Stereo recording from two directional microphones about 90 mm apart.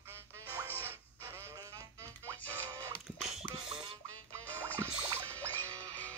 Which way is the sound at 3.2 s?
5° right (ahead or behind).